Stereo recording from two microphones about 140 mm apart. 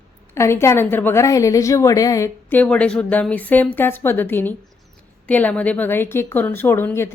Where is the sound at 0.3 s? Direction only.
20° left (ahead or behind).